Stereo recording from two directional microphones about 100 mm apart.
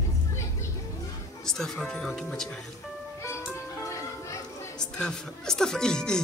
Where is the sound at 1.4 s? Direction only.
5° left (ahead or behind).